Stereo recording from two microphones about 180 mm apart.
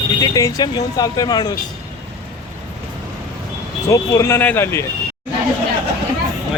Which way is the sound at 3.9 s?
20° left (ahead or behind).